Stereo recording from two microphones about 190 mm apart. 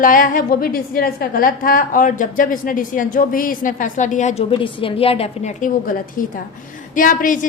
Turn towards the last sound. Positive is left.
turn(degrees=45)  # may be behind; listen again after turning